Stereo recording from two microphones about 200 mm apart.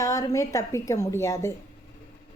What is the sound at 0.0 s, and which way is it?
A woman's voice, 15° left (ahead or behind).